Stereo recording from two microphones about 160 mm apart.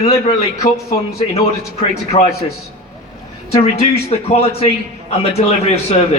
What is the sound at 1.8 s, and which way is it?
Speech, 40° left (ahead or behind).